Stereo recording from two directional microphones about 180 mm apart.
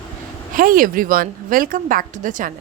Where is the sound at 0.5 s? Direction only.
50° right (ahead or behind).